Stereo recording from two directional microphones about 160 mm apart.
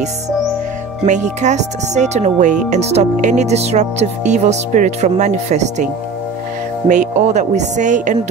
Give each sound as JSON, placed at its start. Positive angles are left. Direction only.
{"t": 1.0, "sound": "speech", "side_deg": -50}
{"t": 6.9, "sound": "speech", "side_deg": -50}